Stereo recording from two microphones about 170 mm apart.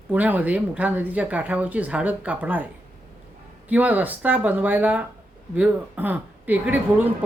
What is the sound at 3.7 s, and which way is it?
Speech, 10° right (ahead or behind).